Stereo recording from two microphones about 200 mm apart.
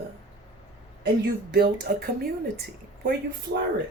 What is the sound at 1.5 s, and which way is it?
Speech, 50° right (ahead or behind).